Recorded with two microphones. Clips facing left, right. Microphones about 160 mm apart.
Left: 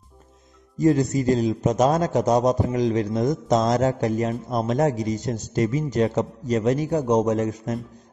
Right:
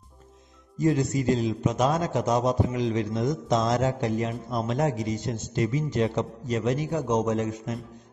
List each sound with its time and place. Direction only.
0.7 s a man's voice: 40° left (ahead or behind)